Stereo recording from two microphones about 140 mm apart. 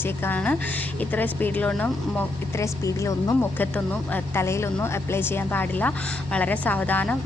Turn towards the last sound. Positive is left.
turn(degrees=10)  # may be behind; listen again after turning